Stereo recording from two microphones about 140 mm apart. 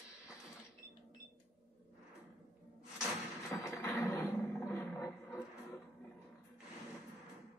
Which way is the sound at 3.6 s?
20° left (ahead or behind).